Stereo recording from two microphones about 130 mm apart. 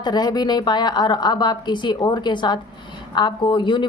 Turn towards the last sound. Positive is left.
turn(degrees=35)  # may be behind; listen again after turning